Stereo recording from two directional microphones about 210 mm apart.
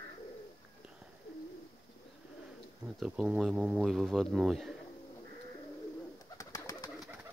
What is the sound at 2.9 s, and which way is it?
Speech, 5° right (ahead or behind).